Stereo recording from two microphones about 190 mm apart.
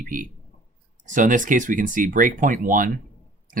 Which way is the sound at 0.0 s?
45° right (ahead or behind).